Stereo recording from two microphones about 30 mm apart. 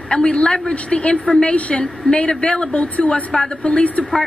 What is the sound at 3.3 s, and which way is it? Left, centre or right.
Speech, left.